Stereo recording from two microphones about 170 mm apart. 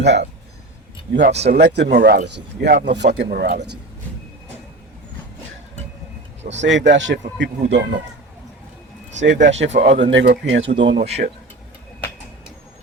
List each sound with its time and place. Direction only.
0.0 s speech: 80° right
1.2 s speech: 40° right (ahead or behind)
1.5 s speech: 75° right (ahead or behind)
3.2 s speech: 65° right (ahead or behind)
6.5 s speech: 90° right
7.8 s speech: 65° right (ahead or behind)
9.5 s speech: 90° right
9.7 s speech: 45° right (ahead or behind)
10.0 s speech: 90° right
10.9 s speech: 40° right (ahead or behind)